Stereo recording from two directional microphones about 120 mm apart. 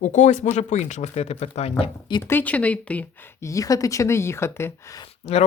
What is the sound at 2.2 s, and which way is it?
Speech, 15° left (ahead or behind).